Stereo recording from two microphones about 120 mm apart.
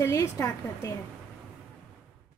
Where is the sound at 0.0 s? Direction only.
20° left (ahead or behind).